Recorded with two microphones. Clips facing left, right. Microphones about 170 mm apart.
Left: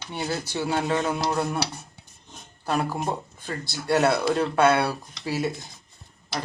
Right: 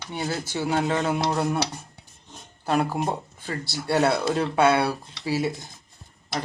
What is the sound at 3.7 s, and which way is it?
Speech, 30° right (ahead or behind).